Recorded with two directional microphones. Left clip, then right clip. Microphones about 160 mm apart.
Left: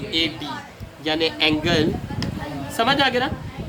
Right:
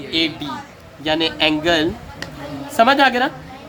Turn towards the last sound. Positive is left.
turn(degrees=-65)  # may be behind; listen again after turning